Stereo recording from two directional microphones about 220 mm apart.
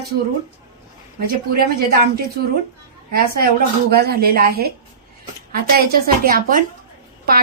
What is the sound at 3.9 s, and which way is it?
A woman's voice, 45° right (ahead or behind).